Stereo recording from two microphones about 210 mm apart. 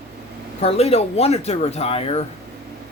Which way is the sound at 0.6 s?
30° left (ahead or behind).